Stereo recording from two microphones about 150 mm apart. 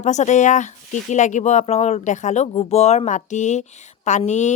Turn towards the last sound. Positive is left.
turn(degrees=50)  # may be behind; listen again after turning